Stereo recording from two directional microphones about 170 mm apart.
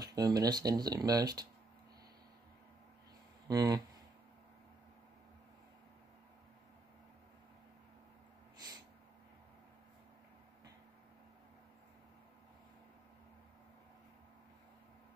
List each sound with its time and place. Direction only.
0.0 s speech: 20° right (ahead or behind)
3.4 s speech: 20° right (ahead or behind)